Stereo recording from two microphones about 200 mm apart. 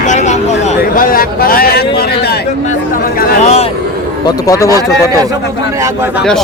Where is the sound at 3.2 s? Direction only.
35° left (ahead or behind).